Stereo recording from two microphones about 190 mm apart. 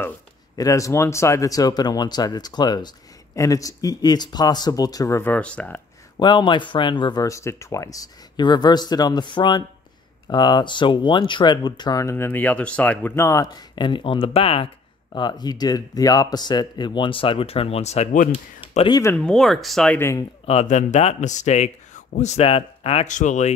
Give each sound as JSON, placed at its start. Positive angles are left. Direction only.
{"t": 0.6, "sound": "speech", "side_deg": 15}
{"t": 6.1, "sound": "speech", "side_deg": 25}
{"t": 18.9, "sound": "speech", "side_deg": 15}
{"t": 20.4, "sound": "speech", "side_deg": 35}